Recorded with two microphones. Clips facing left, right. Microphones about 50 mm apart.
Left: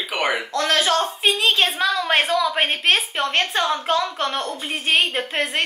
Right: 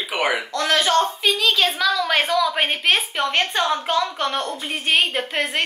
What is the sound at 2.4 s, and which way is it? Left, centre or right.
A woman's voice, centre.